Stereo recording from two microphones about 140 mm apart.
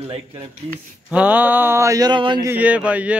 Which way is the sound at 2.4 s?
10° right (ahead or behind).